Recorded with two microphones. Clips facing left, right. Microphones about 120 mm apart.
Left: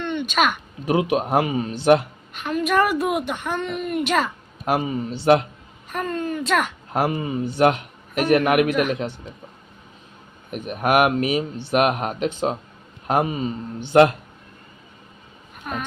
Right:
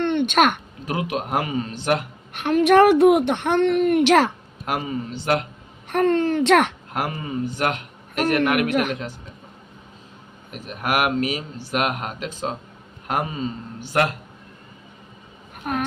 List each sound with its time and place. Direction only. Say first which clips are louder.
0.0 s a sound: right 4 dB; 60° right (ahead or behind)
0.9 s speech: left 5 dB; 20° left (ahead or behind)
2.3 s a woman's voice: right 6 dB; 65° right (ahead or behind)
4.6 s speech: left 3 dB; 25° left (ahead or behind)
5.9 s a woman's voice: right 7 dB; 70° right (ahead or behind)
7.0 s speech: left 3 dB; 20° left (ahead or behind)
10.5 s speech: left 5 dB; 20° left (ahead or behind)
15.6 s a sound: right 4 dB; 55° right (ahead or behind)